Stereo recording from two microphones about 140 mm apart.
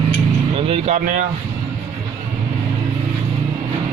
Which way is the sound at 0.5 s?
45° right (ahead or behind).